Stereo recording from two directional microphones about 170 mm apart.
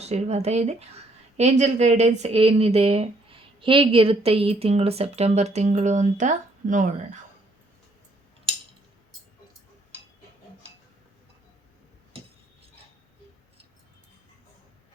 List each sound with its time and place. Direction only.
0.0 s a woman's voice: 40° right (ahead or behind)